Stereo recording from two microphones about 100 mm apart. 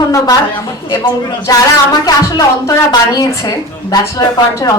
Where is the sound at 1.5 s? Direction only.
35° left (ahead or behind).